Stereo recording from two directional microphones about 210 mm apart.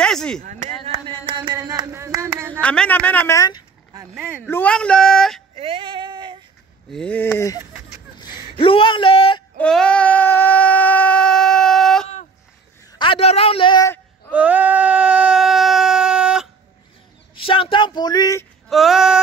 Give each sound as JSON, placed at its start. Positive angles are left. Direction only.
{"t": 0.0, "sound": "a sound", "side_deg": 5}
{"t": 0.4, "sound": "a sound", "side_deg": -35}
{"t": 2.6, "sound": "speech", "side_deg": 5}
{"t": 4.1, "sound": "speech", "side_deg": -5}
{"t": 4.5, "sound": "speech", "side_deg": 5}
{"t": 5.6, "sound": "female singing", "side_deg": -25}
{"t": 6.9, "sound": "speech", "side_deg": 5}
{"t": 8.5, "sound": "a man's voice", "side_deg": 25}
{"t": 9.6, "sound": "a sound", "side_deg": 5}
{"t": 13.0, "sound": "a man's voice", "side_deg": 25}
{"t": 14.3, "sound": "a sound", "side_deg": -5}
{"t": 17.4, "sound": "speech", "side_deg": 25}
{"t": 18.7, "sound": "speech", "side_deg": 0}